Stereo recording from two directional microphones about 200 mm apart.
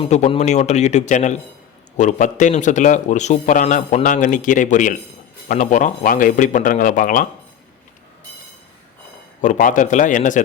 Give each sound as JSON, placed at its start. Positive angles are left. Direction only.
{"t": 0.0, "sound": "a man's voice", "side_deg": 30}
{"t": 9.4, "sound": "a man's voice", "side_deg": 40}